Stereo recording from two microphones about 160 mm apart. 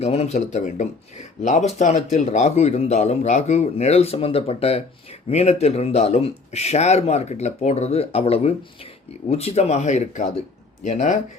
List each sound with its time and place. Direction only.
0.0 s speech: 45° left (ahead or behind)